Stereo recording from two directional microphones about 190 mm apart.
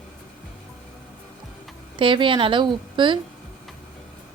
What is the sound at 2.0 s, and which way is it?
A woman's voice, 25° right (ahead or behind).